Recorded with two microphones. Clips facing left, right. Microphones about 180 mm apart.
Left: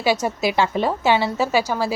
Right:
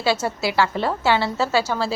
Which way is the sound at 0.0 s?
15° left (ahead or behind).